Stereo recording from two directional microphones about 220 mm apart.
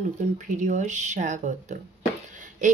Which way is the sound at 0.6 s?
35° right (ahead or behind).